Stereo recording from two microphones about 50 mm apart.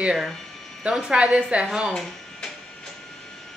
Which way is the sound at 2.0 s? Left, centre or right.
Centre.